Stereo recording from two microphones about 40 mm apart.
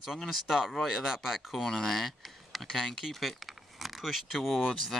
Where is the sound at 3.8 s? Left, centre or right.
Centre.